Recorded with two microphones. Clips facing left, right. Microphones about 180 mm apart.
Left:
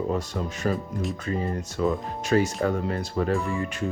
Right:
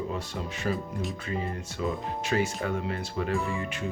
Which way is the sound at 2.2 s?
40° left (ahead or behind).